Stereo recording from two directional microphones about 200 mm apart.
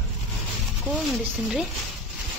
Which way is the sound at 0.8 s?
Centre (ahead or behind).